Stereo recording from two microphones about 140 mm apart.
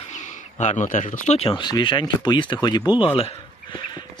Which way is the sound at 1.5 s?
30° left (ahead or behind).